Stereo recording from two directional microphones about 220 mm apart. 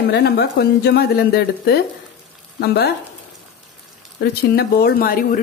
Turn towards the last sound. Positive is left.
turn(degrees=40)  # may be behind; listen again after turning